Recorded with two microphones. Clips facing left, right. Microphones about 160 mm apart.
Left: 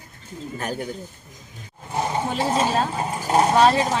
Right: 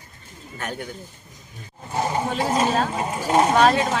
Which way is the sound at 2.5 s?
Centre (ahead or behind).